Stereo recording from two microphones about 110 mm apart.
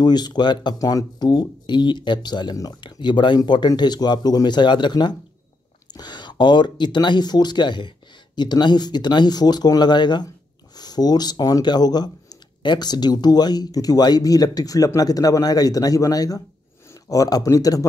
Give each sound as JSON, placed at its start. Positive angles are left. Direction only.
{"t": 0.0, "sound": "speech", "side_deg": 40}